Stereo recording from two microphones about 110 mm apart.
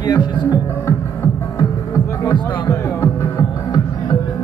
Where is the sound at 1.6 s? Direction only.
30° left (ahead or behind).